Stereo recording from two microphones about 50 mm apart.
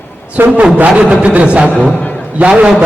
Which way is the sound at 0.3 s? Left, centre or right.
Right.